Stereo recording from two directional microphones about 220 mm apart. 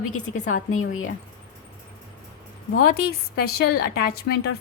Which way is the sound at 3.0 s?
45° left (ahead or behind).